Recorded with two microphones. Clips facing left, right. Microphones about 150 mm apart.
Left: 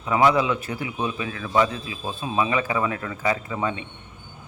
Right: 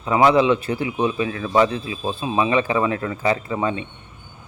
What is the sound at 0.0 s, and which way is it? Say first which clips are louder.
A man's voice: right 4 dB; 30° right (ahead or behind).